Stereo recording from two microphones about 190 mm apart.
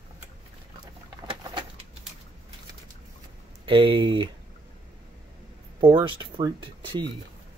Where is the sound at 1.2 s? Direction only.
25° right (ahead or behind).